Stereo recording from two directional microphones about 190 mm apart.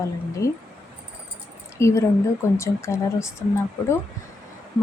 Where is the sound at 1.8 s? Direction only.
15° left (ahead or behind).